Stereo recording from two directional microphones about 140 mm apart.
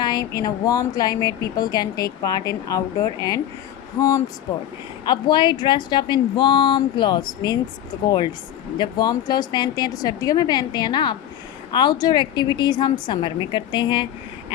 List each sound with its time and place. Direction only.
0.0 s speech: 30° left (ahead or behind)
4.5 s speech: 25° left (ahead or behind)
5.0 s speech: 35° left (ahead or behind)